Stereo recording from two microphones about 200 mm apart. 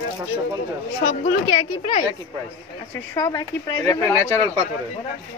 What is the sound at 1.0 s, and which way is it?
A woman's voice, 35° left (ahead or behind).